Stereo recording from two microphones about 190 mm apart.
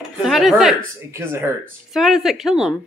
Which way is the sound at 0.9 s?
10° right (ahead or behind).